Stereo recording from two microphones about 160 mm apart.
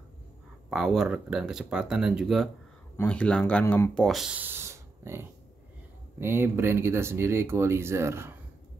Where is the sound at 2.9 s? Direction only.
10° left (ahead or behind).